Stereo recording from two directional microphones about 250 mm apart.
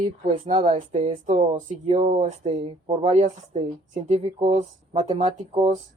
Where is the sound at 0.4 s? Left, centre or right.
Right.